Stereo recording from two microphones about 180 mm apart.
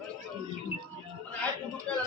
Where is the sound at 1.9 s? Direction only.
5° left (ahead or behind).